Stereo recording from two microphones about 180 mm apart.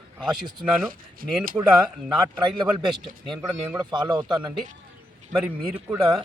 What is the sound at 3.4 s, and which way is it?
Speech, 20° right (ahead or behind).